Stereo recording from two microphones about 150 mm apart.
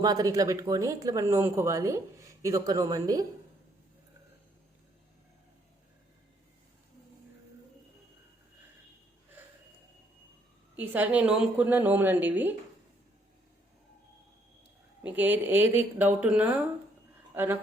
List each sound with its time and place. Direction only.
0.0 s speech: 25° right (ahead or behind)
10.8 s a woman's voice: 10° right (ahead or behind)
15.0 s a woman's voice: 10° right (ahead or behind)